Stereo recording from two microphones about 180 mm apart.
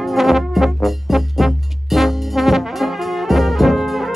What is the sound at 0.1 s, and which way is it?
Brass instrument, centre (ahead or behind).